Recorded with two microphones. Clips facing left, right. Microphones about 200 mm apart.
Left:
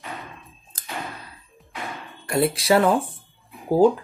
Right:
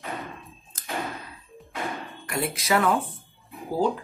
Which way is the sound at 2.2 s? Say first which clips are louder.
Left 8 dB; 30° left (ahead or behind).